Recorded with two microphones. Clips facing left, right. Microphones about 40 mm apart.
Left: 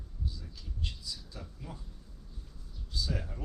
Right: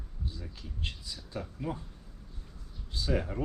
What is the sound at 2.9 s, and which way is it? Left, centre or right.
Speech, right.